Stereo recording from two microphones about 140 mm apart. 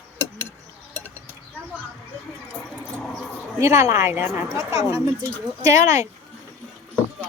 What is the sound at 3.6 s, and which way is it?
A woman's voice, 20° right (ahead or behind).